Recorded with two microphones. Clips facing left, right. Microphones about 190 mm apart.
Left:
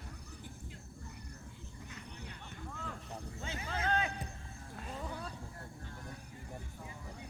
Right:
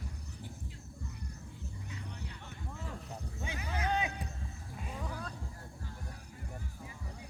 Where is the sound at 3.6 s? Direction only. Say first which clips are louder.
Right 1 dB; 15° right (ahead or behind).